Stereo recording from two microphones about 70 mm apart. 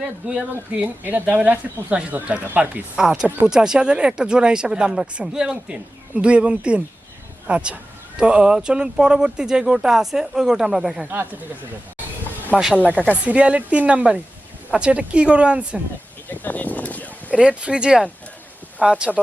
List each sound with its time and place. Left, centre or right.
0.0 s speech: centre
3.0 s speech: centre
11.0 s speech: right
12.5 s speech: centre
16.3 s speech: left
17.3 s speech: centre